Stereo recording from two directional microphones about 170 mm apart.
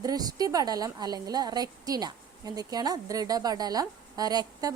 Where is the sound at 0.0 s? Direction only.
20° right (ahead or behind).